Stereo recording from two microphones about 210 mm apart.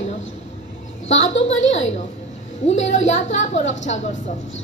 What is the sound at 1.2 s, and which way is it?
A woman's voice, 30° left (ahead or behind).